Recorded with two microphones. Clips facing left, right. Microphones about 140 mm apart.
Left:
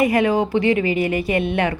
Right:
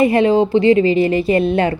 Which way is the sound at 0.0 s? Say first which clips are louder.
Right 4 dB; 25° right (ahead or behind).